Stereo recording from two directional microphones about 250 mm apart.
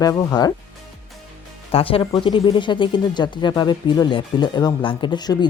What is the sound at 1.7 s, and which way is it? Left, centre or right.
Speech, left.